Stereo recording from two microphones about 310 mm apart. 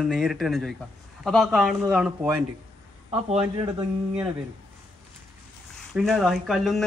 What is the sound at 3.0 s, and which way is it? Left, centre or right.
A man's voice, centre.